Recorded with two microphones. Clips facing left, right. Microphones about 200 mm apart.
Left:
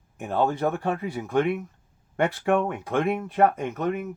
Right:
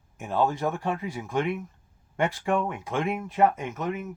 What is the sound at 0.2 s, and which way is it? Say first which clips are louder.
Speech: left 2 dB; 60° left (ahead or behind).